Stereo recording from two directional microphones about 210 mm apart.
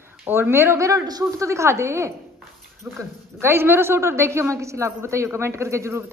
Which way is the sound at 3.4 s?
10° right (ahead or behind).